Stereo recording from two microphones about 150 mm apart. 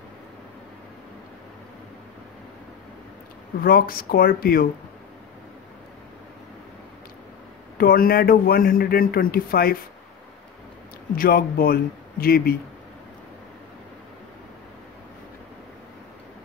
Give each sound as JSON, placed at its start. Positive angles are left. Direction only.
{"t": 3.6, "sound": "a man's voice", "side_deg": 75}
{"t": 7.7, "sound": "speech", "side_deg": 75}
{"t": 11.1, "sound": "a man's voice", "side_deg": 80}